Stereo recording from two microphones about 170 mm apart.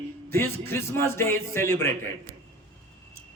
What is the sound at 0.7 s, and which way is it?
A man's voice, 15° left (ahead or behind).